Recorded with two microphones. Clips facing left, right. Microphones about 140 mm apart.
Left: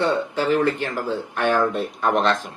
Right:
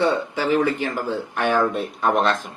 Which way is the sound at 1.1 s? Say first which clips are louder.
Left 2 dB; 60° left (ahead or behind).